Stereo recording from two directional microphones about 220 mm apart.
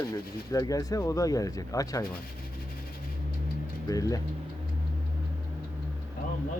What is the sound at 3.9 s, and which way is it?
Speech, 15° left (ahead or behind).